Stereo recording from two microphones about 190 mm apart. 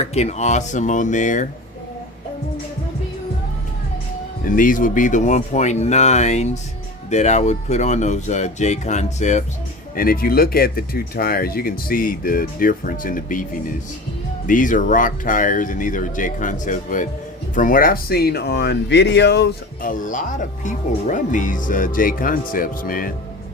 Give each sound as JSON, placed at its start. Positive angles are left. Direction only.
{"t": 0.0, "sound": "speech", "side_deg": 35}
{"t": 4.4, "sound": "speech", "side_deg": 45}
{"t": 9.9, "sound": "speech", "side_deg": 50}